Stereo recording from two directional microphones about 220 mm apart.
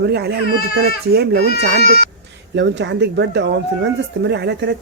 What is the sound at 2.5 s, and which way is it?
Speech, 55° right (ahead or behind).